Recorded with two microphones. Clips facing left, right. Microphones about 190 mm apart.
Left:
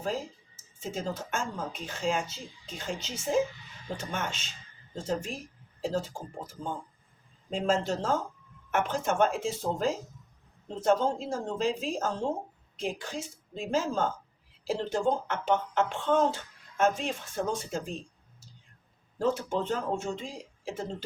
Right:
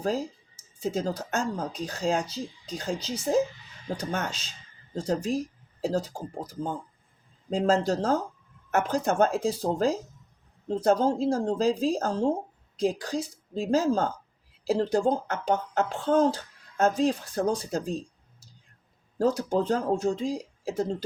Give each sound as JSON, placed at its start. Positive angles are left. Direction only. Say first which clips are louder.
{"t": 0.0, "sound": "speech", "louder": "right 5 dB", "side_deg": -40}
{"t": 19.2, "sound": "speech", "louder": "right 4 dB", "side_deg": -40}